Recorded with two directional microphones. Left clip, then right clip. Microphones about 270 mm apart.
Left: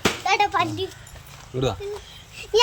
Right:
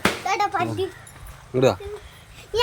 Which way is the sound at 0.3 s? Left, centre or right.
Centre.